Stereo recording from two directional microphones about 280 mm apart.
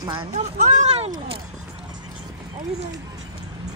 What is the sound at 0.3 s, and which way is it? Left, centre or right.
Speech, right.